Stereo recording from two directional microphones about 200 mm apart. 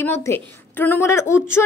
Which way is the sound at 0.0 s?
10° left (ahead or behind).